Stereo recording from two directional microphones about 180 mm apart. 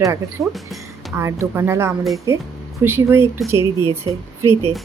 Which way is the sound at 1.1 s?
15° right (ahead or behind).